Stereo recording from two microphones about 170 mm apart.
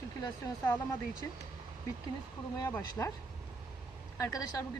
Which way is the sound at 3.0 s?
10° left (ahead or behind).